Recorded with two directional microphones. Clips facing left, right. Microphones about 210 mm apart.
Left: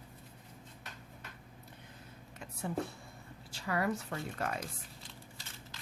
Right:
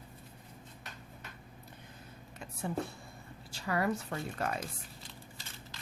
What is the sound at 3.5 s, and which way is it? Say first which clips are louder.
A woman's voice: right 1 dB; 35° right (ahead or behind).